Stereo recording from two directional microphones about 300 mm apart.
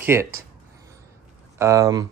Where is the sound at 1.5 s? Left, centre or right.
Centre.